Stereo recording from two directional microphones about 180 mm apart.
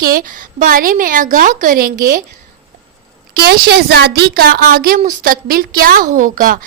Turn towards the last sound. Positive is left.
turn(degrees=-50)  # may be behind; listen again after turning